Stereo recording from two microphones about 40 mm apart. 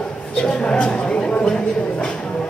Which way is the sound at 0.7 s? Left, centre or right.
Left.